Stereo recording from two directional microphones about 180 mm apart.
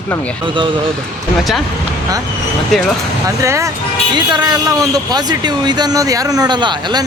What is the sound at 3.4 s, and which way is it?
Speech, 15° right (ahead or behind).